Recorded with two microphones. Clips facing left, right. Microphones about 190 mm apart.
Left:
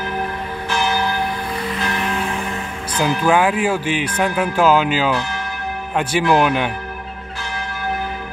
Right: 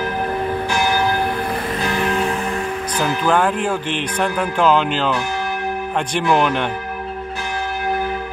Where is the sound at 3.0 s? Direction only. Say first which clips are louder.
Left 2 dB; 10° left (ahead or behind).